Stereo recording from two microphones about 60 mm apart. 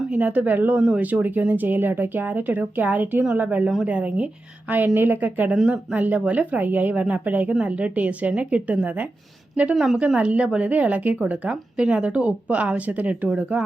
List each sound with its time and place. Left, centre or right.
0.1 s speech: right
9.7 s speech: centre
10.2 s speech: right